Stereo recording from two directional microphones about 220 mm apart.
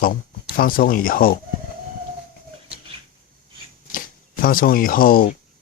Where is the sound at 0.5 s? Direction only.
40° left (ahead or behind).